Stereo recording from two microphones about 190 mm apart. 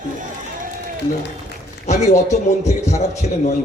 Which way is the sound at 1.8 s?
35° left (ahead or behind).